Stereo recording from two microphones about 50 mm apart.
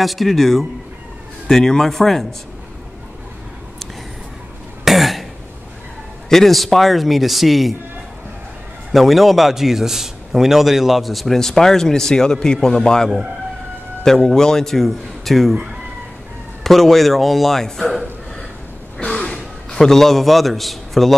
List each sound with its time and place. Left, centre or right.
0.0 s a man's voice: centre
4.8 s cough: centre
6.2 s a man's voice: centre
8.9 s a man's voice: centre
16.6 s a man's voice: centre
19.0 s gasp: left
19.7 s a man's voice: centre